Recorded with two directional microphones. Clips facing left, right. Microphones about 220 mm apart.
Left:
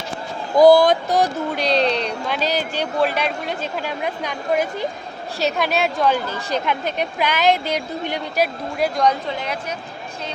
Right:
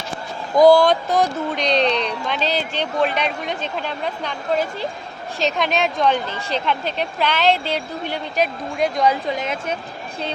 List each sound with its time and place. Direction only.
0.5 s speech: 15° left (ahead or behind)
8.8 s a woman's voice: centre (ahead or behind)
9.2 s a woman's voice: 15° right (ahead or behind)